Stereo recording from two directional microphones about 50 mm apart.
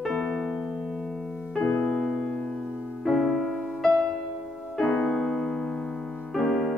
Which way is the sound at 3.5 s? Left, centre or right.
Centre.